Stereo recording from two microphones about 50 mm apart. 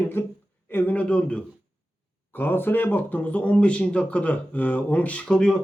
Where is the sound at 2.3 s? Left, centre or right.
Left.